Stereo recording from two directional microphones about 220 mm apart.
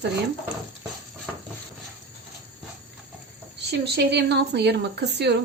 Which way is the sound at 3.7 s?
50° right (ahead or behind).